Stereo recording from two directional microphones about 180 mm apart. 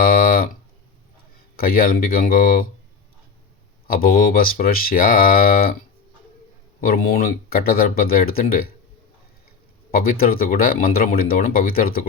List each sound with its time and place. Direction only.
0.0 s a sound: 50° left (ahead or behind)
1.5 s speech: 55° left (ahead or behind)
3.8 s speech: 55° left (ahead or behind)
6.8 s speech: 55° left (ahead or behind)
9.9 s speech: 55° left (ahead or behind)